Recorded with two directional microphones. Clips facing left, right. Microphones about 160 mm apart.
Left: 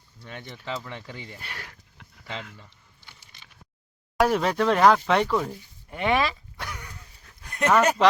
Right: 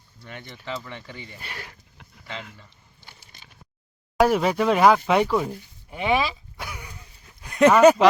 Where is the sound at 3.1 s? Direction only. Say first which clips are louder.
Right 3 dB; 40° right (ahead or behind).